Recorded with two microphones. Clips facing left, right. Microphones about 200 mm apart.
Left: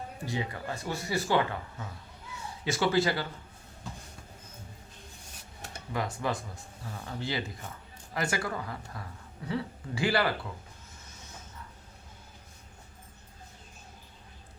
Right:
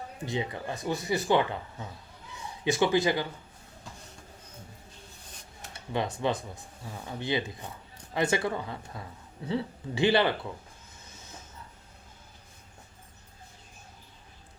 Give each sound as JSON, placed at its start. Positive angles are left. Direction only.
{"t": 0.3, "sound": "speech", "side_deg": -20}
{"t": 5.9, "sound": "speech", "side_deg": -25}